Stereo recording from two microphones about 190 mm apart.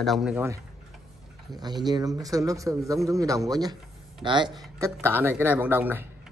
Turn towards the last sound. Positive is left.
turn(degrees=-10)  # may be behind; listen again after turning